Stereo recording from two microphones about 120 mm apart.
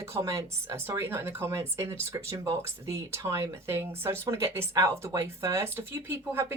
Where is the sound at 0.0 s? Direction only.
25° right (ahead or behind).